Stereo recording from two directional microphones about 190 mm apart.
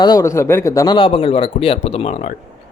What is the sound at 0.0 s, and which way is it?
Speech, 20° left (ahead or behind).